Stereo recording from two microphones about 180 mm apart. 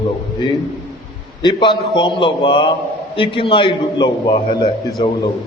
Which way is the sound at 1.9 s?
25° left (ahead or behind).